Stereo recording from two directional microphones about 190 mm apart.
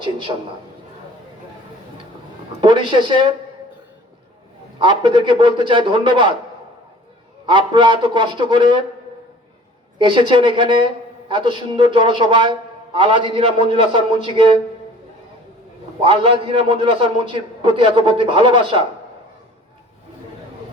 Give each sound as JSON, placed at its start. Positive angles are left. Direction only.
{"t": 0.0, "sound": "a man's voice", "side_deg": -25}
{"t": 2.6, "sound": "a man's voice", "side_deg": -25}
{"t": 4.8, "sound": "a man's voice", "side_deg": -25}
{"t": 7.4, "sound": "a man's voice", "side_deg": -25}
{"t": 10.0, "sound": "a man's voice", "side_deg": -25}
{"t": 16.0, "sound": "a man's voice", "side_deg": -30}